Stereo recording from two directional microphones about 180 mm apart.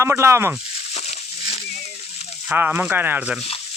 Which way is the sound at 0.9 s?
35° left (ahead or behind).